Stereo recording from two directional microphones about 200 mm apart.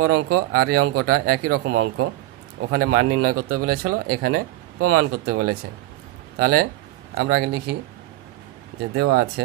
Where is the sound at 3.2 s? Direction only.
45° right (ahead or behind).